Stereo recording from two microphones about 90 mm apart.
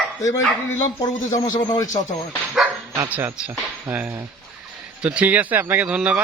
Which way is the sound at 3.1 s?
20° right (ahead or behind).